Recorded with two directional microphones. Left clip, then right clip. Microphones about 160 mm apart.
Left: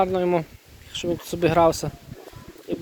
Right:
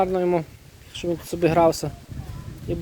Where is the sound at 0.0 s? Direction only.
30° right (ahead or behind).